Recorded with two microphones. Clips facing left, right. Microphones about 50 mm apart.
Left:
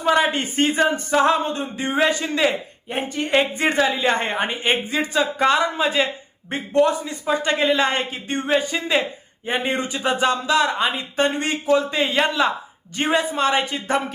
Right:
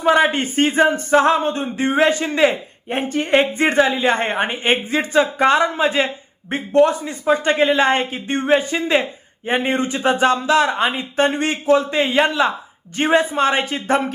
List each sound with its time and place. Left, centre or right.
0.2 s a woman's voice: right
1.1 s a sound: right
2.0 s a man's voice: right